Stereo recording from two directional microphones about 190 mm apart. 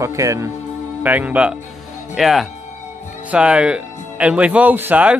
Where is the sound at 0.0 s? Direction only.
15° right (ahead or behind).